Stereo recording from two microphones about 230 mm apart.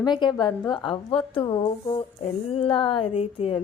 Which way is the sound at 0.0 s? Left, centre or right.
Centre.